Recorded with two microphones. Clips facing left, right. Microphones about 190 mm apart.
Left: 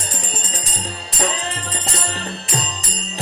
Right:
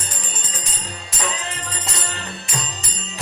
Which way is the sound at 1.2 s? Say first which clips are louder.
Left 4 dB; 35° left (ahead or behind).